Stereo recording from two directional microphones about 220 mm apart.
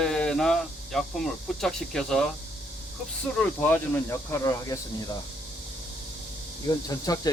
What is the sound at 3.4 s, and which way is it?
Speech, 5° left (ahead or behind).